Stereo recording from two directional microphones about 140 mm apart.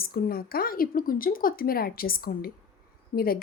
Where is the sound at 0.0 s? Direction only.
90° left.